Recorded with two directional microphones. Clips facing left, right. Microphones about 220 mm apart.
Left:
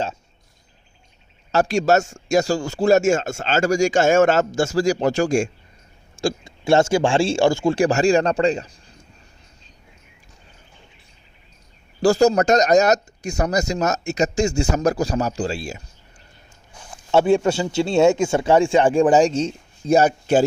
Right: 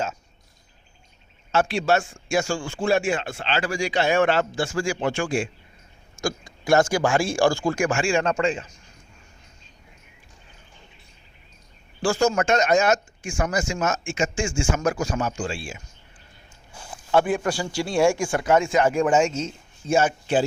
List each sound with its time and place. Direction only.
1.5 s a man's voice: 40° left (ahead or behind)
6.2 s speech: 25° left (ahead or behind)
12.0 s speech: 40° left (ahead or behind)
17.1 s speech: 25° left (ahead or behind); by 20.4 s 40° left (ahead or behind)